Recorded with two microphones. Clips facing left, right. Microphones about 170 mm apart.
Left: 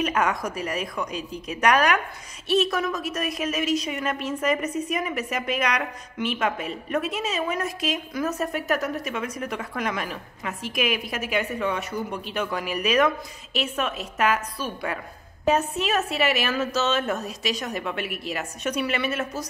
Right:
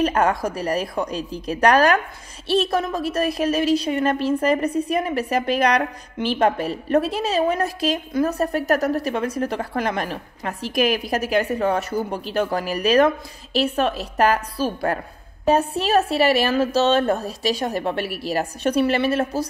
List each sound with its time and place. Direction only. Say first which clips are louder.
0.0 s a woman's voice: right 5 dB; 30° right (ahead or behind)